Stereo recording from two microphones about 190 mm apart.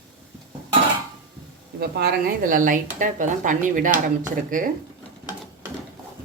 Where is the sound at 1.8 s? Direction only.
50° right (ahead or behind).